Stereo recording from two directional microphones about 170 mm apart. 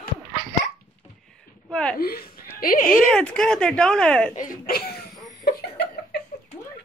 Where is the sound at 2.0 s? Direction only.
65° left (ahead or behind).